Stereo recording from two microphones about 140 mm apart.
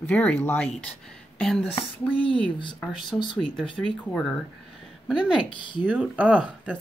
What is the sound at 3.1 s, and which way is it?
Speech, 10° left (ahead or behind).